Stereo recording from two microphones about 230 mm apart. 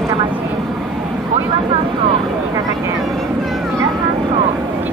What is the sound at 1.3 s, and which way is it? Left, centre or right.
Vehicle, right.